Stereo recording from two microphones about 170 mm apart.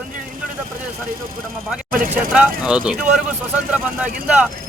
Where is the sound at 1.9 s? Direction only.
55° right (ahead or behind).